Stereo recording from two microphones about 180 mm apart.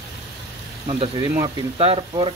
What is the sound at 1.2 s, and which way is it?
Speech, 20° right (ahead or behind).